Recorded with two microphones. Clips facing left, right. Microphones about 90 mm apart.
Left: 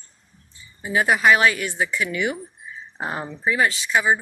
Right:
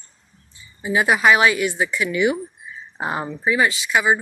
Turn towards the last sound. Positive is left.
turn(degrees=-5)  # may be behind; listen again after turning